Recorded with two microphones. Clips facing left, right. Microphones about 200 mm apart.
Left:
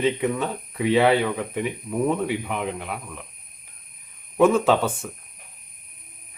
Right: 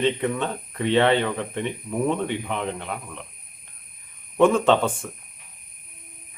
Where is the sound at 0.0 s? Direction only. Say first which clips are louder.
Left 1 dB; 5° left (ahead or behind).